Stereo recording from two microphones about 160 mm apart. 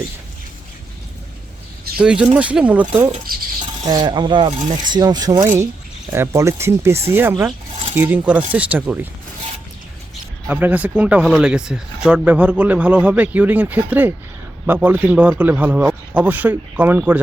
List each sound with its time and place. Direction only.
2.0 s speech: 5° right (ahead or behind)
3.3 s speech: 65° right (ahead or behind)
3.8 s speech: 25° right (ahead or behind)
6.1 s speech: 15° right (ahead or behind)
10.5 s speech: 10° right (ahead or behind)